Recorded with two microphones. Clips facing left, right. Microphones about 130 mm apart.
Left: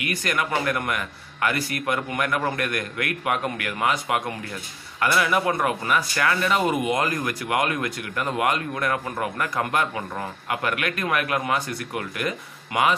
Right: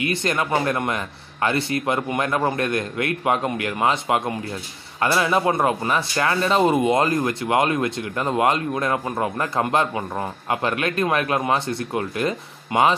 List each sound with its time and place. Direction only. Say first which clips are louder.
0.0 s speech: right 3 dB; 25° right (ahead or behind)